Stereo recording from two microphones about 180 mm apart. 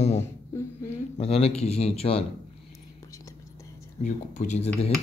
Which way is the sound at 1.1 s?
35° left (ahead or behind).